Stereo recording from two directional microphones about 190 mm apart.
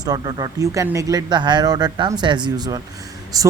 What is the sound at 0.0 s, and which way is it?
Speech, 20° right (ahead or behind).